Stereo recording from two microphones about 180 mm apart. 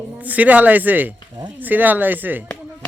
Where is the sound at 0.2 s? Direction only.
10° right (ahead or behind).